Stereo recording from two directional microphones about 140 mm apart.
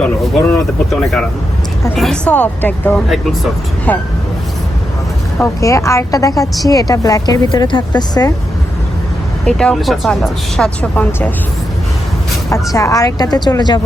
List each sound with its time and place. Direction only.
0.0 s speech: 15° left (ahead or behind)
2.0 s speech: 5° left (ahead or behind)
5.4 s speech: 20° left (ahead or behind)
9.5 s speech: 5° left (ahead or behind)
12.7 s speech: 25° left (ahead or behind)